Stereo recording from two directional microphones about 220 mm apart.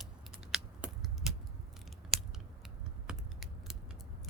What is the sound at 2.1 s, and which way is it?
Scissors, 25° right (ahead or behind).